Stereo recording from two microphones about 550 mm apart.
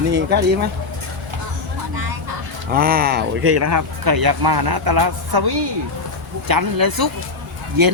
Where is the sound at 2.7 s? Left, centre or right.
Centre.